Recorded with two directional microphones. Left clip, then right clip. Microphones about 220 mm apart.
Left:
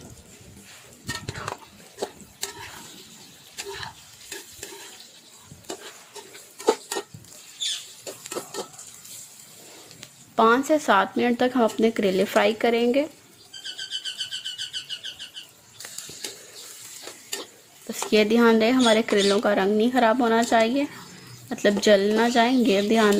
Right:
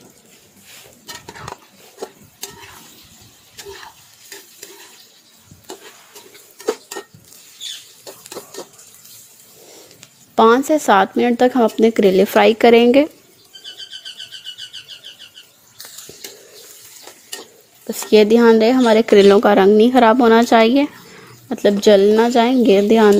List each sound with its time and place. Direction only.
10.3 s speech: 30° right (ahead or behind)
18.1 s speech: 30° right (ahead or behind)
21.5 s speech: 25° right (ahead or behind)